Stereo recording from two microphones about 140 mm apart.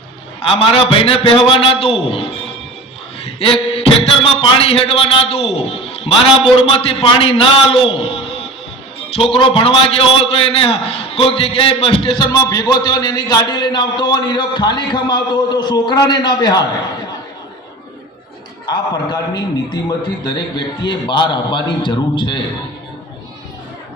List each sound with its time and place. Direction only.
0.4 s a man's voice: 40° left (ahead or behind)
3.3 s a man's voice: 45° left (ahead or behind)
18.6 s a man's voice: 30° left (ahead or behind)